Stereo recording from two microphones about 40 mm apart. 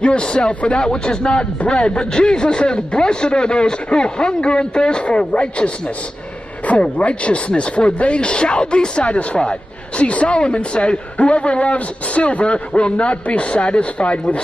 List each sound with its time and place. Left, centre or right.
0.0 s speech: left
6.7 s speech: left